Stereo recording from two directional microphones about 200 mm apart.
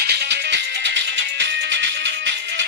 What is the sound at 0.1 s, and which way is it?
Music, 55° right (ahead or behind).